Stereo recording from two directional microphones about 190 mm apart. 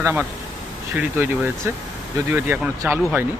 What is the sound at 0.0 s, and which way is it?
Speech, 10° right (ahead or behind).